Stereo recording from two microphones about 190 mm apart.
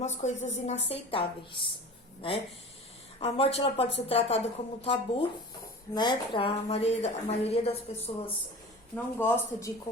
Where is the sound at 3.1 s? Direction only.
30° left (ahead or behind).